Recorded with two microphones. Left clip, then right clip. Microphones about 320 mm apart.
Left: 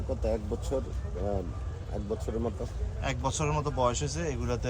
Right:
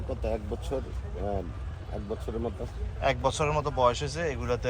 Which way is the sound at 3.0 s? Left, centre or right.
Centre.